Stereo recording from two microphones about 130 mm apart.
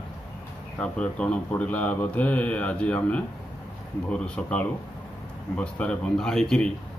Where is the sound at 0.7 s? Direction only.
10° left (ahead or behind).